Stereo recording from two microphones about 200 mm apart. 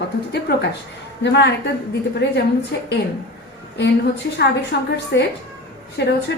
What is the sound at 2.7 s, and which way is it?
Speech, 60° left (ahead or behind).